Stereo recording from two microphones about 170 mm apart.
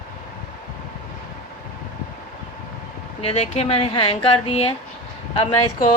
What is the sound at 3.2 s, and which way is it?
A woman's voice, 35° left (ahead or behind).